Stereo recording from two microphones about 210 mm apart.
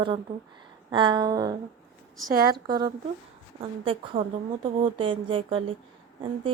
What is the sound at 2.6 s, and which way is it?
A woman's voice, 20° right (ahead or behind).